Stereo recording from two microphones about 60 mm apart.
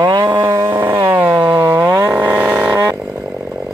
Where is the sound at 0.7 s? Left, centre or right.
Right.